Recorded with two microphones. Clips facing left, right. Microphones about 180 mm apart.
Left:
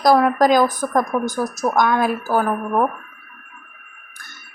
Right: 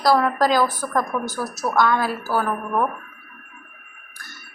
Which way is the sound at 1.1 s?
30° left (ahead or behind).